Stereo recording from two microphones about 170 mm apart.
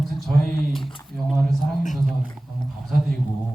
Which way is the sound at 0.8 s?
30° left (ahead or behind).